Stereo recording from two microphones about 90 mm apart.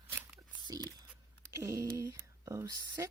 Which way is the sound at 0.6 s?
50° right (ahead or behind).